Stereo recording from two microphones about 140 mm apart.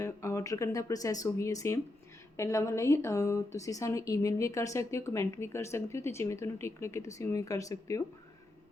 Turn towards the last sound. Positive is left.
turn(degrees=25)  # may be behind; listen again after turning